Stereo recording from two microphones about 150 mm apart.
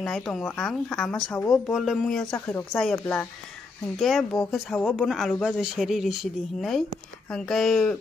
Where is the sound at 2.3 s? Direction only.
15° left (ahead or behind).